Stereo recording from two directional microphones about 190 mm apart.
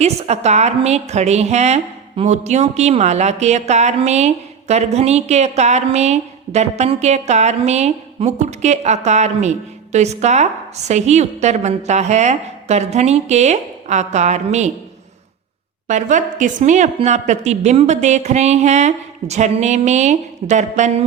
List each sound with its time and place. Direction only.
0.0 s speech: 35° right (ahead or behind)
15.9 s speech: 40° right (ahead or behind)